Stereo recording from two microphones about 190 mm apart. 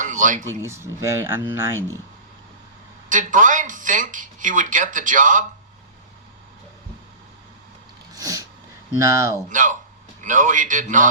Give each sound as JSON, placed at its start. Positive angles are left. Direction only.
{"t": 0.0, "sound": "a sound", "side_deg": -45}
{"t": 0.6, "sound": "speech", "side_deg": -15}
{"t": 3.1, "sound": "speech", "side_deg": -45}
{"t": 8.1, "sound": "sneeze", "side_deg": -15}
{"t": 9.0, "sound": "speech", "side_deg": -15}
{"t": 9.5, "sound": "speech", "side_deg": -45}